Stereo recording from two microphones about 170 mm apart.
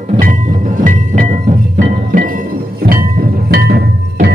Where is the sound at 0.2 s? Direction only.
50° right (ahead or behind).